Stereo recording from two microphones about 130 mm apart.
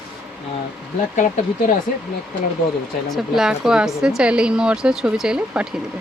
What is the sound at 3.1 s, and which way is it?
A woman's voice, 5° right (ahead or behind).